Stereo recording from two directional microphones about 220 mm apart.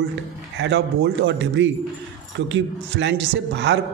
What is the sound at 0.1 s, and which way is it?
A man's voice, 55° right (ahead or behind).